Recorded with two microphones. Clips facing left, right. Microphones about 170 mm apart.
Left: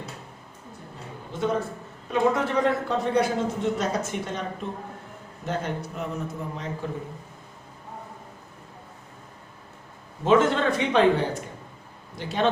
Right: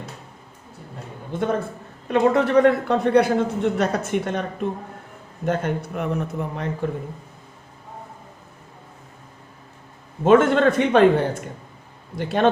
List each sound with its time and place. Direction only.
1.3 s a man's voice: 50° right (ahead or behind)
2.0 s a man's voice: 65° right (ahead or behind)
5.5 s a man's voice: 55° right (ahead or behind)
10.2 s a man's voice: 55° right (ahead or behind)